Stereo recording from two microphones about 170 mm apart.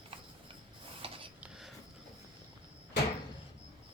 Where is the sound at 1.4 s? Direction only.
5° right (ahead or behind).